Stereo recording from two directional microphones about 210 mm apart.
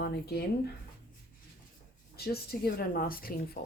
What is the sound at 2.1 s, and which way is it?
Speech, 50° left (ahead or behind).